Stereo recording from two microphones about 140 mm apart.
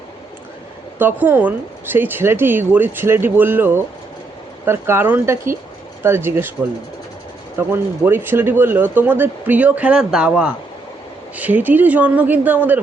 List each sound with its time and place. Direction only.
0.9 s speech: 10° right (ahead or behind)
7.7 s speech: 15° right (ahead or behind)